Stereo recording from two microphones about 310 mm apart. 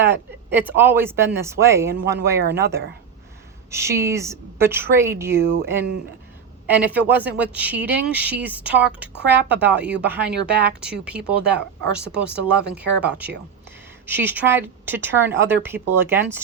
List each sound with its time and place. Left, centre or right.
0.0 s speech: centre
2.4 s speech: right
3.7 s speech: centre
9.1 s speech: right
9.6 s speech: centre